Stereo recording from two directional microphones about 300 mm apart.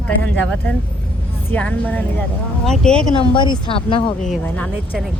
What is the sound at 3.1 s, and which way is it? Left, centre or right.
A woman's voice, centre.